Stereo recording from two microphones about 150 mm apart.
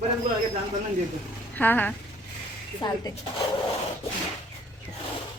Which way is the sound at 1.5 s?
10° left (ahead or behind).